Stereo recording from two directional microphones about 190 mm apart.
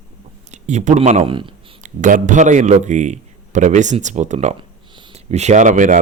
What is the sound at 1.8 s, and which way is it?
Speech, 45° right (ahead or behind).